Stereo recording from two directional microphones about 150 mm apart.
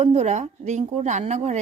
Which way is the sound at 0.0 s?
50° right (ahead or behind).